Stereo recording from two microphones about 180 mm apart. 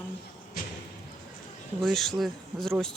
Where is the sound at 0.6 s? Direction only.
55° left (ahead or behind).